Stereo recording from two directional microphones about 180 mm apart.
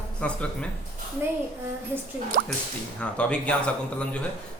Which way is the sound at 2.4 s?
60° right (ahead or behind).